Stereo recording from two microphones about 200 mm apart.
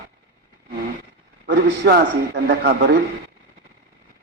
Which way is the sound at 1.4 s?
55° right (ahead or behind).